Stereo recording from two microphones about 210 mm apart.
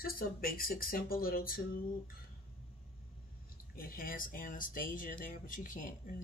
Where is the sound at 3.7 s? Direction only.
45° left (ahead or behind).